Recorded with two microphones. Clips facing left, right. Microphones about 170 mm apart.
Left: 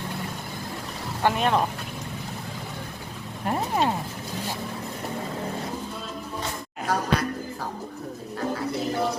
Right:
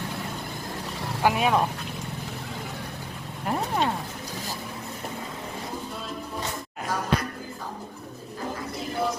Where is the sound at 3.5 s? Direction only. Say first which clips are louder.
Left 1 dB; centre (ahead or behind).